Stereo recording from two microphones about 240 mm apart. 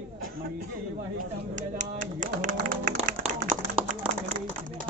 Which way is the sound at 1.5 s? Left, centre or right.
Right.